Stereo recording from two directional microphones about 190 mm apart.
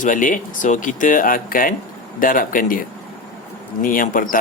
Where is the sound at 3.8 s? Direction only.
45° left (ahead or behind).